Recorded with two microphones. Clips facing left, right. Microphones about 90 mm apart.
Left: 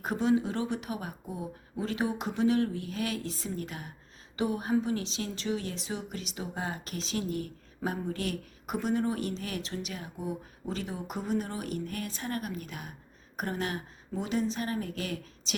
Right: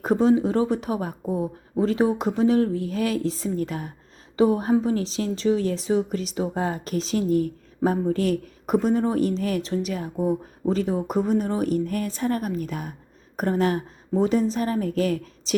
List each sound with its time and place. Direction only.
0.0 s a woman's voice: 35° right (ahead or behind)